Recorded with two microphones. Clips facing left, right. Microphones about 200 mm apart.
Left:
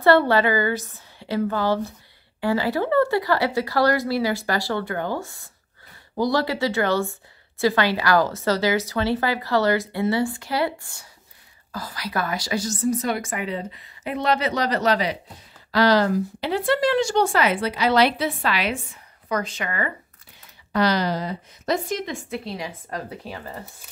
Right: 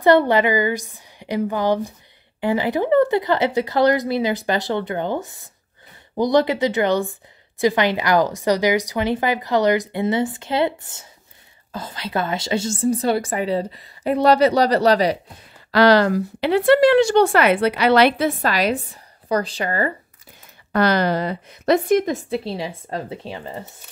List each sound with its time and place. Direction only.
0.0 s a woman's voice: 20° right (ahead or behind); by 15.1 s 40° right (ahead or behind)
15.7 s speech: 70° right (ahead or behind); by 19.9 s 35° right (ahead or behind)
20.7 s speech: 55° right (ahead or behind)
22.3 s speech: 30° right (ahead or behind)